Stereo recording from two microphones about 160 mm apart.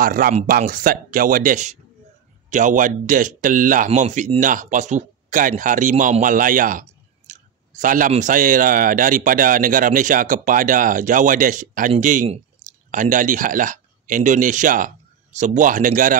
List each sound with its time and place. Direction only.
0.0 s speech: 65° right (ahead or behind)